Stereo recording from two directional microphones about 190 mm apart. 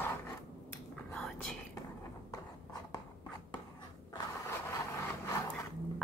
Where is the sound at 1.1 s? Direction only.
5° left (ahead or behind).